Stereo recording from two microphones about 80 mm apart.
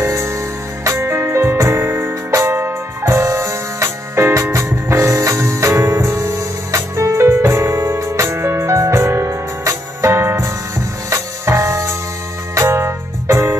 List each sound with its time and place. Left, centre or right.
0.0 s music: right